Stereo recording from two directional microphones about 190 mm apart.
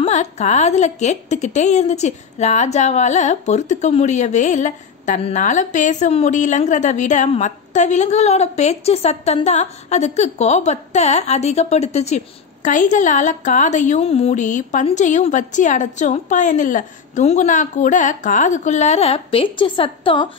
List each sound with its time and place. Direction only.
0.0 s a woman's voice: 35° left (ahead or behind)